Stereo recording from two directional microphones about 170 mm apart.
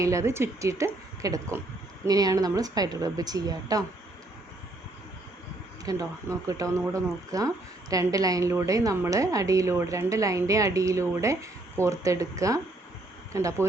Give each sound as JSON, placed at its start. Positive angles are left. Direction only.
{"t": 0.0, "sound": "a woman's voice", "side_deg": -20}
{"t": 5.8, "sound": "a woman's voice", "side_deg": -20}